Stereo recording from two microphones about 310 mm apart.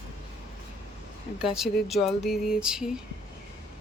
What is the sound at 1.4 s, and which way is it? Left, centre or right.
Speech, centre.